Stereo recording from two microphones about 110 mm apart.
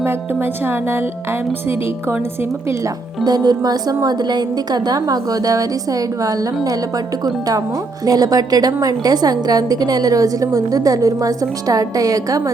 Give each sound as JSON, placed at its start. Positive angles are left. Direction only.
{"t": 0.0, "sound": "speech", "side_deg": -20}
{"t": 3.2, "sound": "a woman's voice", "side_deg": -35}